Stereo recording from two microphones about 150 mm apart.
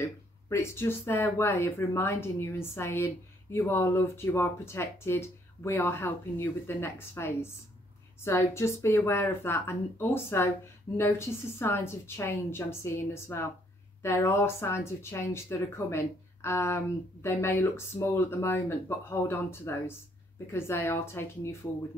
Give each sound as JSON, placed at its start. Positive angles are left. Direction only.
{"t": 0.0, "sound": "speech", "side_deg": 20}